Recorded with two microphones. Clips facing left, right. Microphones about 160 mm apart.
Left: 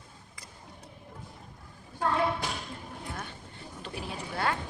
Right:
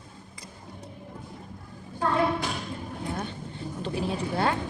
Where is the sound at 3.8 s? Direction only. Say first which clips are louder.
Right 9 dB; 25° right (ahead or behind).